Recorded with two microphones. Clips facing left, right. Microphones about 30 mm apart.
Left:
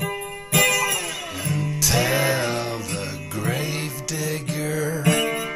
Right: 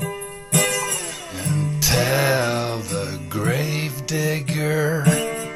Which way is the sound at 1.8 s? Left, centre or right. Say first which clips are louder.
Right 1 dB; centre.